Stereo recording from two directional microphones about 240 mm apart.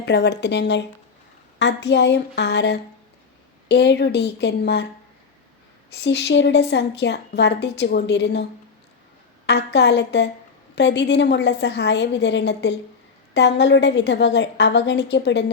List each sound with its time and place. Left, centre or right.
0.0 s a woman's voice: left
5.9 s a woman's voice: left
9.5 s a woman's voice: left